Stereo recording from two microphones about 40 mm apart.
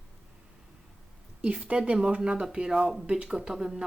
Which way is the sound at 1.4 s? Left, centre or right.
Right.